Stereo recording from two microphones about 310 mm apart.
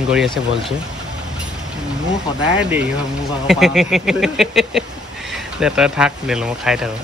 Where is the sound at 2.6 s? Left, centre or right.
Centre.